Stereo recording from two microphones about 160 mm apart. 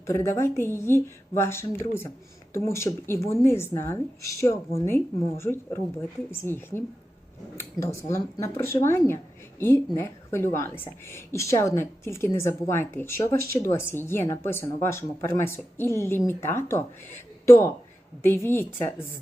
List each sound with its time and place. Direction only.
0.0 s speech: 15° left (ahead or behind)
7.8 s speech: 30° right (ahead or behind)
8.1 s speech: 15° left (ahead or behind)